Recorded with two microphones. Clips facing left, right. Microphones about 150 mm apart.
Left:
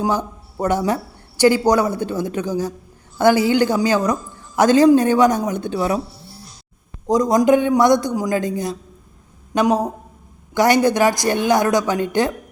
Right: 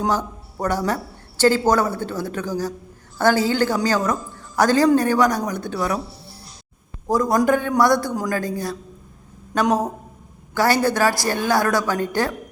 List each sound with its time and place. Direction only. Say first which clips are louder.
0.0 s a man's voice: left 1 dB; 20° left (ahead or behind)
7.1 s a man's voice: left 4 dB; 20° left (ahead or behind)